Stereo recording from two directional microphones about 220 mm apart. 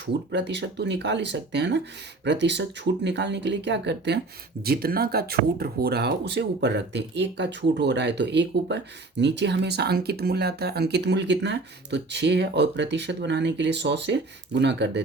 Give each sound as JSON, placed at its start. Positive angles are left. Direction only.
{"t": 0.0, "sound": "speech", "side_deg": -50}